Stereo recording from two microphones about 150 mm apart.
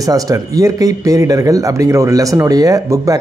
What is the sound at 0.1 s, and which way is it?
Speech, 20° right (ahead or behind).